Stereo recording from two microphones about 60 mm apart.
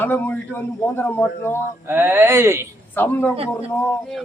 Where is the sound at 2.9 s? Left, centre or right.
Left.